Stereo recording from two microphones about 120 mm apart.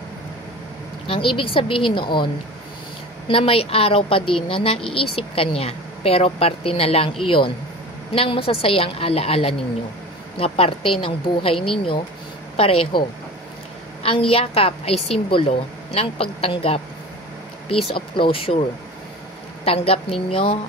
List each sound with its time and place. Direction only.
1.0 s a woman's voice: 50° left (ahead or behind)
3.3 s a woman's voice: 50° left (ahead or behind)
11.5 s speech: 5° left (ahead or behind)
12.5 s a woman's voice: 50° left (ahead or behind)
14.0 s a woman's voice: 50° left (ahead or behind)
19.6 s a woman's voice: 55° left (ahead or behind)